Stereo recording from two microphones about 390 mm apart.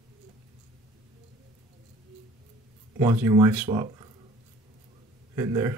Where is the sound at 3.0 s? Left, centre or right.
Centre.